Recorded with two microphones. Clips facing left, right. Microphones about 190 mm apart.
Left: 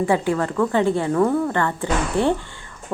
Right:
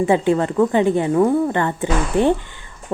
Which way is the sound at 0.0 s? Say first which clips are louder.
Right 4 dB; 20° right (ahead or behind).